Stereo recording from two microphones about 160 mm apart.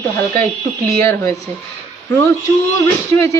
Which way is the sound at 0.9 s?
20° left (ahead or behind).